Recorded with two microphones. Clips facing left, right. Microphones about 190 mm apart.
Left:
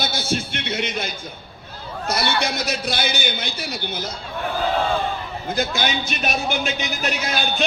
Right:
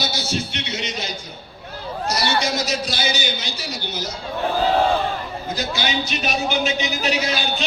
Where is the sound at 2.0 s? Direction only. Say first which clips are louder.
Even; 55° left (ahead or behind).